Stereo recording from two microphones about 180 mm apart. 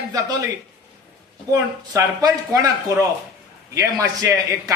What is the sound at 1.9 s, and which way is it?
A man's voice, 20° right (ahead or behind).